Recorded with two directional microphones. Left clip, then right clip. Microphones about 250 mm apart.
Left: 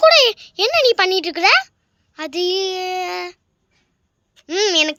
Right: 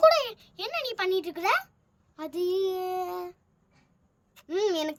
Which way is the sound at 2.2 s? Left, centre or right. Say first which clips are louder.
Left 8 dB; centre.